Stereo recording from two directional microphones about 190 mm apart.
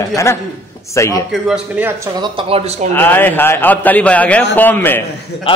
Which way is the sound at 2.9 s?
10° left (ahead or behind).